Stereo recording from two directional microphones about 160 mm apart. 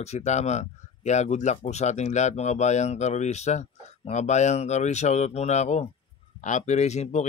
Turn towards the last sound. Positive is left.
turn(degrees=45)  # may be behind; listen again after turning